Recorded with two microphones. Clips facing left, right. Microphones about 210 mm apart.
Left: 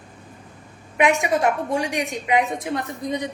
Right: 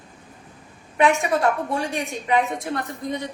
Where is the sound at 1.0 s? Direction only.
15° left (ahead or behind).